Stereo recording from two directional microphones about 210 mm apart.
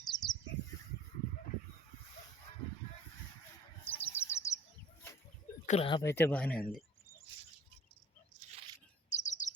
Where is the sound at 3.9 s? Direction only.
10° left (ahead or behind).